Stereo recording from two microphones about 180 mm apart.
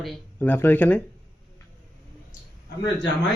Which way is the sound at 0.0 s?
10° left (ahead or behind).